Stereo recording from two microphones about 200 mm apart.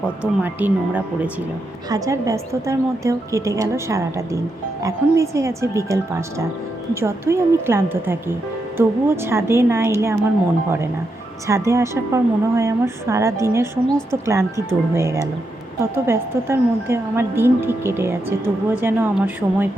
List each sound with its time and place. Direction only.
0.2 s a woman's voice: 5° right (ahead or behind)
11.4 s a woman's voice: 15° right (ahead or behind)